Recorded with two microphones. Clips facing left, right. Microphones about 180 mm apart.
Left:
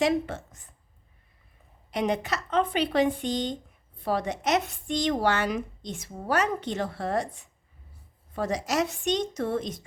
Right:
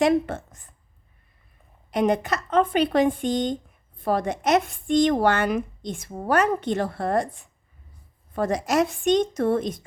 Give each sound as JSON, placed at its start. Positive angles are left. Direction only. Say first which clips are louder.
{"t": 0.0, "sound": "a woman's voice", "louder": "right 5 dB", "side_deg": -55}
{"t": 1.9, "sound": "a woman's voice", "louder": "right 5 dB", "side_deg": -50}